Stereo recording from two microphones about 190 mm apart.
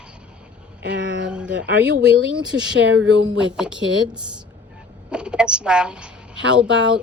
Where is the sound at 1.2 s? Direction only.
5° right (ahead or behind).